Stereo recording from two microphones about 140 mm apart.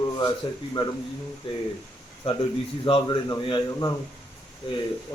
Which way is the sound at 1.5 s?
40° left (ahead or behind).